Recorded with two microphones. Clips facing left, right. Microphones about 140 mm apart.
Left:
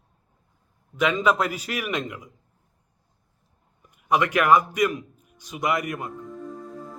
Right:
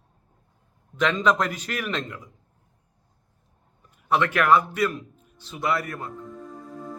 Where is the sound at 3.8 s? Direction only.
15° left (ahead or behind).